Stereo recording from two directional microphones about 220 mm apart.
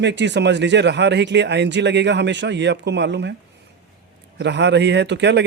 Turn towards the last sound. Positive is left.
turn(degrees=-50)  # may be behind; listen again after turning